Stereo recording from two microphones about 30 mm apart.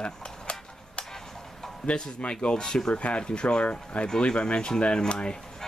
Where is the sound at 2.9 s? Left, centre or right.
Left.